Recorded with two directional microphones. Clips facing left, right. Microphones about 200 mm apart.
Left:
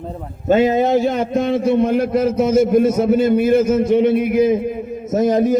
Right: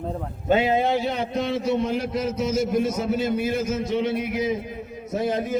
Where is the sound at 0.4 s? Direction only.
45° left (ahead or behind).